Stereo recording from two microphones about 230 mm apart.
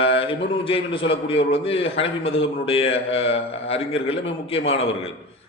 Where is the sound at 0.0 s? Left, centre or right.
Left.